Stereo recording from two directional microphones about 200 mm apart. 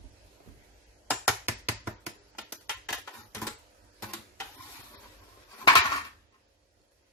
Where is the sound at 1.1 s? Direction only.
10° right (ahead or behind).